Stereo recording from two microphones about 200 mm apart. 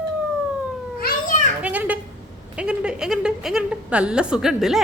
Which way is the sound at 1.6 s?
5° right (ahead or behind).